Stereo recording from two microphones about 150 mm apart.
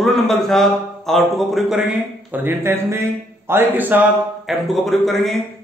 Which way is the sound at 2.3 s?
15° right (ahead or behind).